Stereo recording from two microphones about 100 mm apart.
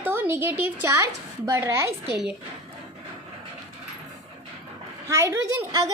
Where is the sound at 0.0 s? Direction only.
20° right (ahead or behind).